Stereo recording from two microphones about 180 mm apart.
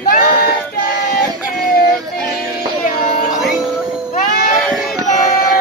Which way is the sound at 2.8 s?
50° left (ahead or behind).